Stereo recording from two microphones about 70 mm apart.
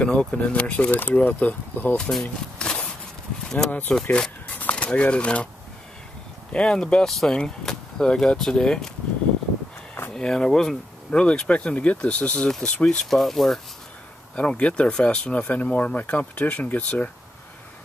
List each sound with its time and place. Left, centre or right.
0.0 s speech: centre
2.0 s speech: centre
2.6 s a sound: centre
3.4 s speech: centre
4.6 s speech: left
6.5 s speech: centre
10.1 s speech: centre
14.3 s speech: centre